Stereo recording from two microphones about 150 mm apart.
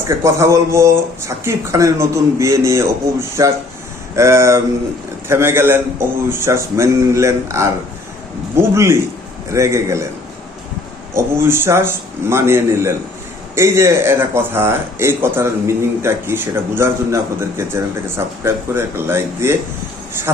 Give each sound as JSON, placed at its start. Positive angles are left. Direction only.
{"t": 0.1, "sound": "a man's voice", "side_deg": -20}
{"t": 11.1, "sound": "a man's voice", "side_deg": -15}
{"t": 18.4, "sound": "a man's voice", "side_deg": -15}